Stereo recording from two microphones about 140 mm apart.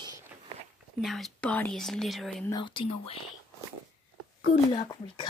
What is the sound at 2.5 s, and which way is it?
Speech, 35° left (ahead or behind).